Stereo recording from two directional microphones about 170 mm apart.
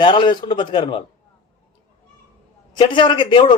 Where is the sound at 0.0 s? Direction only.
30° left (ahead or behind).